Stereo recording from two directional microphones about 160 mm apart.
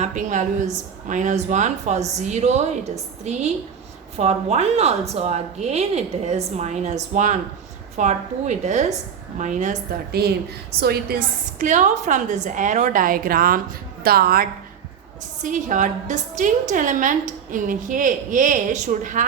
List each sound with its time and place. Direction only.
0.0 s a woman's voice: 50° right (ahead or behind)
10.1 s a woman's voice: 85° right
11.6 s a woman's voice: 50° right (ahead or behind); by 14.4 s 70° right (ahead or behind)
15.4 s a woman's voice: 50° right (ahead or behind)